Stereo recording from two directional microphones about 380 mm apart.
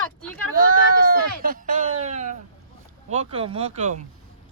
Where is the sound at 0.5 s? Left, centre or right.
Right.